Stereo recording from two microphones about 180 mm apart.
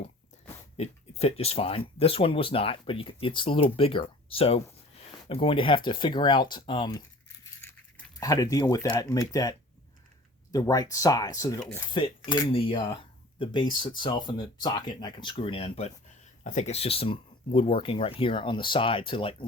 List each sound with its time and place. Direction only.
0.8 s speech: 35° left (ahead or behind)
8.2 s speech: 20° left (ahead or behind)